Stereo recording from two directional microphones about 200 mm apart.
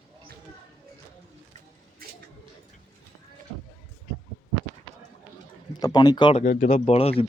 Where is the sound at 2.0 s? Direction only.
45° right (ahead or behind).